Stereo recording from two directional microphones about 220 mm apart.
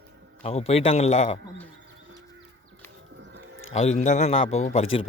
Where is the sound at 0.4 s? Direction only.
25° left (ahead or behind).